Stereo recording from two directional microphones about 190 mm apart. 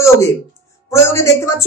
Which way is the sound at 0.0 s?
15° left (ahead or behind).